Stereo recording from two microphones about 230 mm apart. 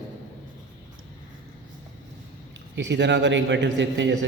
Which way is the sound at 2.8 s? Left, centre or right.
Right.